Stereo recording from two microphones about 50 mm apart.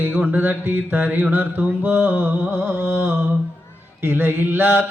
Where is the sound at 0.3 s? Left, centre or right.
Right.